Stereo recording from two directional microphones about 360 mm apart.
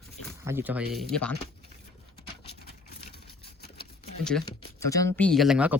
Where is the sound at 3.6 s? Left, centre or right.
Left.